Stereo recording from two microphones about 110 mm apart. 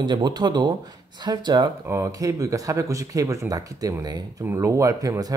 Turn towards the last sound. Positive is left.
turn(degrees=-35)  # may be behind; listen again after turning